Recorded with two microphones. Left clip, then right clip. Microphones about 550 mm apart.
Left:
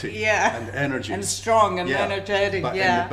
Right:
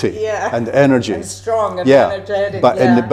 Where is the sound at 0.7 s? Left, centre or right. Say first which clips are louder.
Right 13 dB; right.